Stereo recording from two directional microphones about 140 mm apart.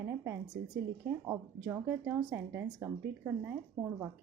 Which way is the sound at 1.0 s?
20° right (ahead or behind).